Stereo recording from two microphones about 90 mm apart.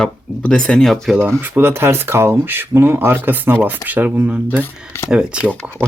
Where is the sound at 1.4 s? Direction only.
25° right (ahead or behind).